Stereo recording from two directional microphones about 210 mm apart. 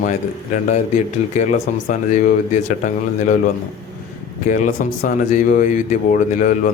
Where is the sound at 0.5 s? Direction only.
35° left (ahead or behind).